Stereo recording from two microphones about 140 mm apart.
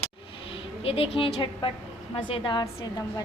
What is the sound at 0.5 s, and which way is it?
A woman's voice, 40° left (ahead or behind).